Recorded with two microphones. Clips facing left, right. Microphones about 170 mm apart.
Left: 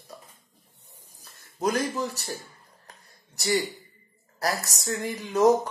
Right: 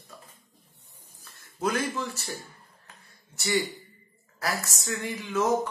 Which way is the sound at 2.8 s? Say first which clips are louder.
Left 2 dB; 40° left (ahead or behind).